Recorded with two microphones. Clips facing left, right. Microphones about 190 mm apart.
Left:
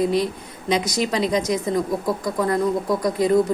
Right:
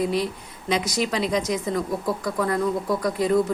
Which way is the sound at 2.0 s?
15° left (ahead or behind).